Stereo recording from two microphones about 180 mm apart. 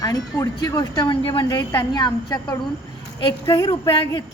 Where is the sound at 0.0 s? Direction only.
20° left (ahead or behind).